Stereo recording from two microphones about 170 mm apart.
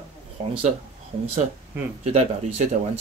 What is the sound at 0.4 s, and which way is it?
Speech, 40° right (ahead or behind).